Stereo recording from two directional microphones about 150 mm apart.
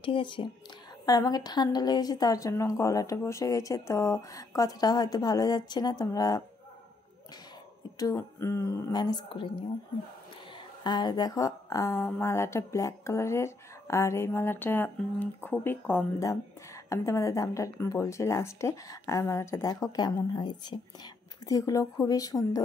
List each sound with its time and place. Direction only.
0.0 s speech: 35° left (ahead or behind)
8.0 s speech: 20° left (ahead or behind)
10.8 s speech: 30° left (ahead or behind)